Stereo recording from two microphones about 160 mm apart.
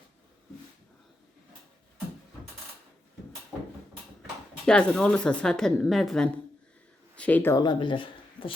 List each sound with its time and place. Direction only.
4.6 s a woman's voice: 5° left (ahead or behind)
7.6 s speech: 30° left (ahead or behind)